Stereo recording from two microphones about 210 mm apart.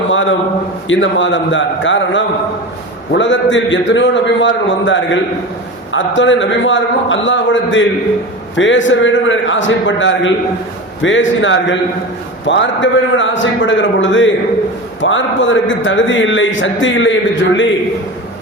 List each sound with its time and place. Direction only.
0.1 s a man's voice: 65° left (ahead or behind)